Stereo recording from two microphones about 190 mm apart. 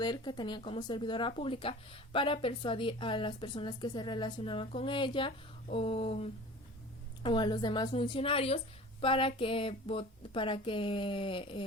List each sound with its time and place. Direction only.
0.0 s a woman's voice: 25° left (ahead or behind)
5.6 s a sound: 30° left (ahead or behind)
7.2 s a woman's voice: 25° left (ahead or behind)